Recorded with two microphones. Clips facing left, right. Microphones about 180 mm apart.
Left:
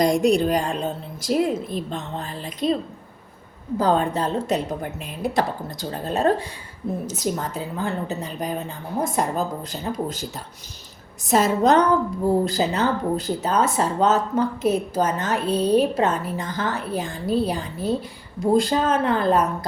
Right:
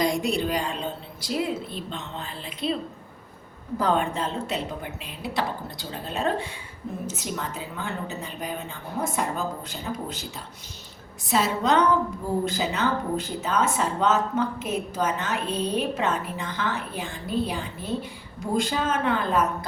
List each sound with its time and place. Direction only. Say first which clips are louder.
0.0 s a woman's voice: left 6 dB; 45° left (ahead or behind)
3.8 s a woman's voice: left 4 dB; 35° left (ahead or behind)